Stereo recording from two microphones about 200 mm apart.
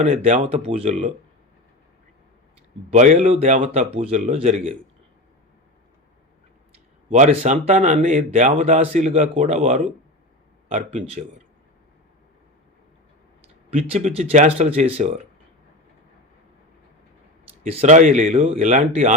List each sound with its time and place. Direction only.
0.0 s a man's voice: 35° right (ahead or behind)
2.9 s a man's voice: 35° right (ahead or behind)
7.1 s a man's voice: 35° right (ahead or behind)
13.7 s a man's voice: 30° right (ahead or behind)
17.6 s a man's voice: 35° right (ahead or behind)